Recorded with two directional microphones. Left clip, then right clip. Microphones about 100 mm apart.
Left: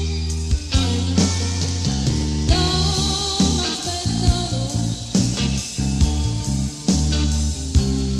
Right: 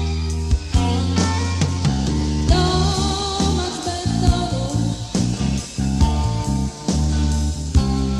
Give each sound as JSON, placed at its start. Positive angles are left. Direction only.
{"t": 1.2, "sound": "music", "side_deg": 25}
{"t": 2.4, "sound": "music", "side_deg": 25}
{"t": 5.1, "sound": "music", "side_deg": 25}
{"t": 6.9, "sound": "music", "side_deg": 25}